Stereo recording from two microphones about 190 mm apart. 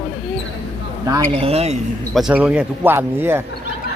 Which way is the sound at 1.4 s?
30° right (ahead or behind).